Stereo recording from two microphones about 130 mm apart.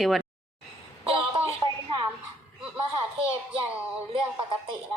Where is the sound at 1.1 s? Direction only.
45° right (ahead or behind).